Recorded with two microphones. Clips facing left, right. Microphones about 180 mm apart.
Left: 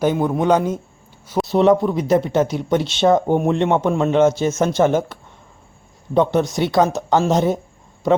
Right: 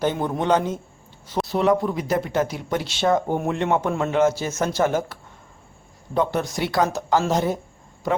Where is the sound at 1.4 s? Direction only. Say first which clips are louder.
Left 6 dB; 25° left (ahead or behind).